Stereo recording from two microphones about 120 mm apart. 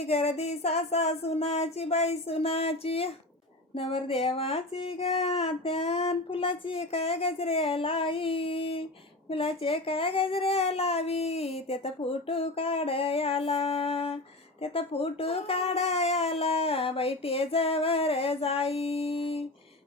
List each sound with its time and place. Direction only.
0.0 s speech: 60° left (ahead or behind)